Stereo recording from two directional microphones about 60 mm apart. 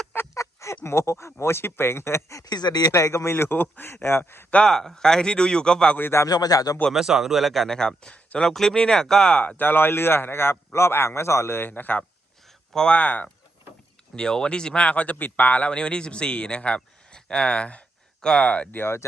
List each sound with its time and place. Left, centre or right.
0.3 s a sound: left
0.9 s speech: left
2.4 s speech: left
3.0 s a man's voice: left
4.6 s speech: centre
6.0 s speech: left
6.2 s speech: left
6.9 s speech: centre
9.6 s a man's voice: left
11.7 s speech: left
14.2 s speech: centre
18.8 s speech: left